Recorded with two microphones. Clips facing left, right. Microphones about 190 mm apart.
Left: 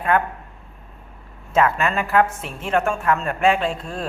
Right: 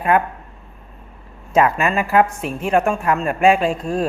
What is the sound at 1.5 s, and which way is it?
A man's voice, 15° right (ahead or behind).